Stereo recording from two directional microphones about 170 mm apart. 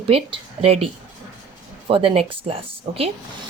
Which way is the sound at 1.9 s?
30° right (ahead or behind).